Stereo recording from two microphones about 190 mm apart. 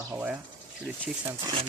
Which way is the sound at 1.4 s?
20° right (ahead or behind).